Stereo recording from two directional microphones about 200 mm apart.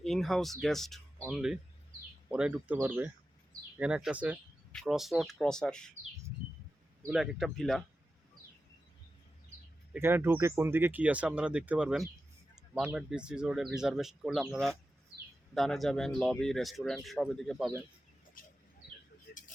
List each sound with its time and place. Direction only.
0.0 s speech: centre (ahead or behind)
7.1 s speech: 5° right (ahead or behind)
9.9 s speech: 10° right (ahead or behind)
18.4 s bird: 45° left (ahead or behind)